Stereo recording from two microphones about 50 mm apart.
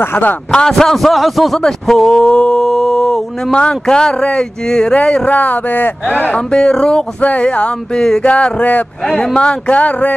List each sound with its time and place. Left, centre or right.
0.0 s speech: left
0.5 s a man's voice: centre
1.6 s speech: centre
2.6 s mantra: centre
3.5 s a man's voice: centre; by 6.3 s left
6.3 s speech: centre
7.2 s speech: left
9.0 s speech: centre